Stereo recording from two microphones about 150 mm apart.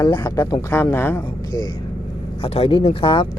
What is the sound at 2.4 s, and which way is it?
Speech, 40° left (ahead or behind).